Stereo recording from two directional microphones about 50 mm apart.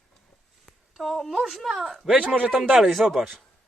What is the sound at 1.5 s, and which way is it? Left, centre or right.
Speech, centre.